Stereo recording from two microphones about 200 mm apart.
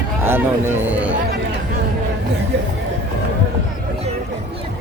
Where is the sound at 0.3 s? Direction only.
10° right (ahead or behind).